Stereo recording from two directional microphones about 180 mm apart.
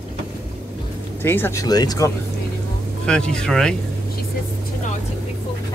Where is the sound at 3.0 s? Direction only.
5° left (ahead or behind).